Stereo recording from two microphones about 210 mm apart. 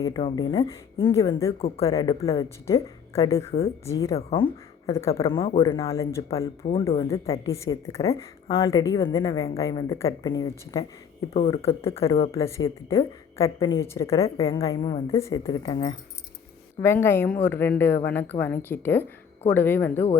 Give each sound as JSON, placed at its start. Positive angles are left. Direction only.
{"t": 0.0, "sound": "a woman's voice", "side_deg": 20}
{"t": 5.4, "sound": "a woman's voice", "side_deg": 25}
{"t": 6.6, "sound": "speech", "side_deg": 30}
{"t": 7.3, "sound": "a woman's voice", "side_deg": 15}
{"t": 12.0, "sound": "speech", "side_deg": 25}
{"t": 12.3, "sound": "a woman's voice", "side_deg": 15}